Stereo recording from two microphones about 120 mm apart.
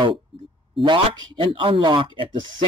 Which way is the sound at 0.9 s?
45° right (ahead or behind).